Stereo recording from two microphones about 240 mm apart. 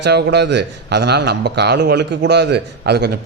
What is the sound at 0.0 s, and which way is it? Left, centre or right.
Speech, right.